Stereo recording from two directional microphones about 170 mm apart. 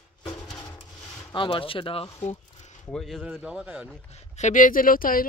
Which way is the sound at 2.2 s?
40° left (ahead or behind).